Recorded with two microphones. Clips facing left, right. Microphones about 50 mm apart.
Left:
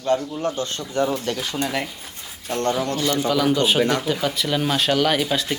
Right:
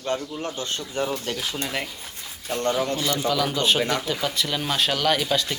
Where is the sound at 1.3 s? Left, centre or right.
Centre.